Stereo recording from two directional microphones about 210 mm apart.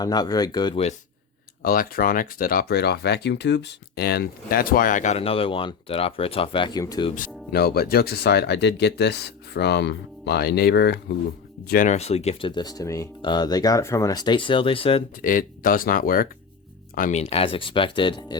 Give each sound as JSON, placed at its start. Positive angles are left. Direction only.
{"t": 0.0, "sound": "speech", "side_deg": 20}
{"t": 1.6, "sound": "speech", "side_deg": 45}
{"t": 7.2, "sound": "speech", "side_deg": 50}
{"t": 15.2, "sound": "speech", "side_deg": 40}